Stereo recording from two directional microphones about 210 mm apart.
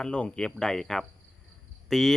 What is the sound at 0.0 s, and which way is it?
Speech, 5° left (ahead or behind).